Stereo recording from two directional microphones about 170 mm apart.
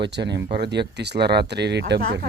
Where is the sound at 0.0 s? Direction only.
90° right.